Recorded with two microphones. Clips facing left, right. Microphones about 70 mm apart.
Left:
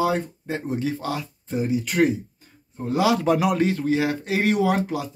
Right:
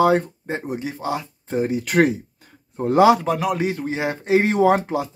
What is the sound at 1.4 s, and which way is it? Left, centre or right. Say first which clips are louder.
Speech: right 2 dB; right.